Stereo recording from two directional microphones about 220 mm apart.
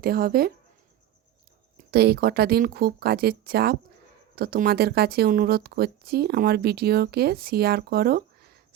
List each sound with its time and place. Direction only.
0.0 s speech: 45° right (ahead or behind)
1.9 s speech: 45° right (ahead or behind)